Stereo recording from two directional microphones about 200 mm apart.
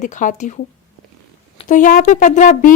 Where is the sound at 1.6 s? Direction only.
40° left (ahead or behind).